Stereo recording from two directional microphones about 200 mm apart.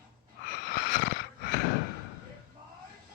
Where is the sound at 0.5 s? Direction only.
50° left (ahead or behind).